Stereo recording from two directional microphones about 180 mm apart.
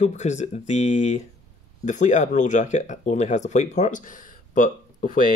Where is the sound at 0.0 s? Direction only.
40° left (ahead or behind).